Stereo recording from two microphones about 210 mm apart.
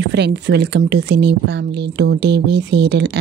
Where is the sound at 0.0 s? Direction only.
55° right (ahead or behind).